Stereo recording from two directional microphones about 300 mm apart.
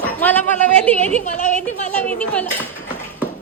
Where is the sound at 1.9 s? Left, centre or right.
Centre.